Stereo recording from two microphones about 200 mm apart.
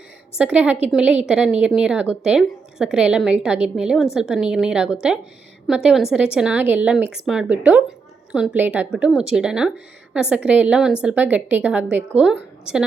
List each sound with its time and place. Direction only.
0.3 s a woman's voice: 5° right (ahead or behind)